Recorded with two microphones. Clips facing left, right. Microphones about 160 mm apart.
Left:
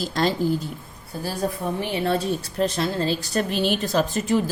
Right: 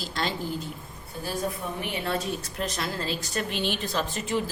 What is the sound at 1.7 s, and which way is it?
A woman's voice, 30° left (ahead or behind).